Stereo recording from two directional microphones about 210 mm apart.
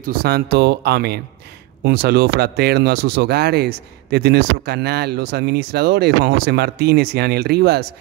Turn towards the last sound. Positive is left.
turn(degrees=-50)  # may be behind; listen again after turning